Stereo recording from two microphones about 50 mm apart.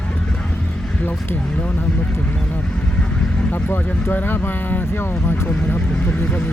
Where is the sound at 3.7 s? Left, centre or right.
Left.